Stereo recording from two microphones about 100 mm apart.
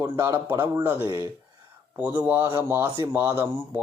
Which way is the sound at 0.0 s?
20° right (ahead or behind).